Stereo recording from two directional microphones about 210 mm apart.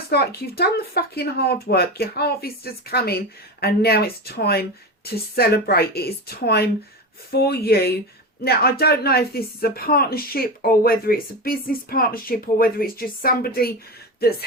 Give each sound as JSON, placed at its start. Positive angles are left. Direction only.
{"t": 0.1, "sound": "speech", "side_deg": 50}